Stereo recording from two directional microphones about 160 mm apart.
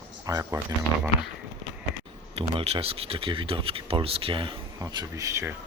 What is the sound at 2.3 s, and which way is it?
Speech, 35° right (ahead or behind).